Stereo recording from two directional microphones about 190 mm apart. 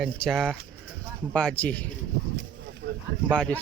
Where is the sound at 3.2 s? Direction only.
5° left (ahead or behind).